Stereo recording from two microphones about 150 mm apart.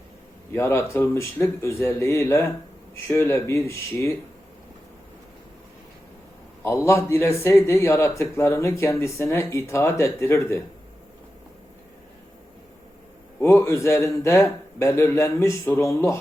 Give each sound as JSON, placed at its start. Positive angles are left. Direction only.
{"t": 0.5, "sound": "speech", "side_deg": 15}
{"t": 6.6, "sound": "speech", "side_deg": 15}
{"t": 13.4, "sound": "speech", "side_deg": 15}